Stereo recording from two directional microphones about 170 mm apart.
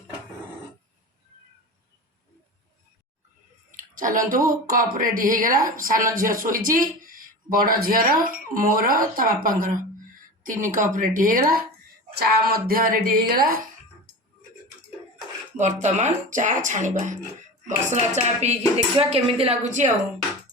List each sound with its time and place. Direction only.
3.7 s speech: 50° right (ahead or behind)
15.5 s a woman's voice: 45° right (ahead or behind)